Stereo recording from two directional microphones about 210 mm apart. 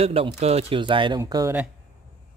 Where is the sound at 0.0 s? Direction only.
30° right (ahead or behind).